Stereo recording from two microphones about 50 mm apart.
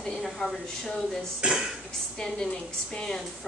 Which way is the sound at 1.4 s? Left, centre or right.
Centre.